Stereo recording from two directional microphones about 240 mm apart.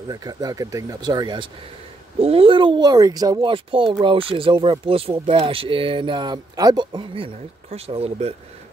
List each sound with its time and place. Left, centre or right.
0.1 s speech: centre